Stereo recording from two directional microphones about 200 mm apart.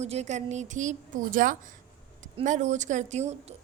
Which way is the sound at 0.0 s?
35° right (ahead or behind).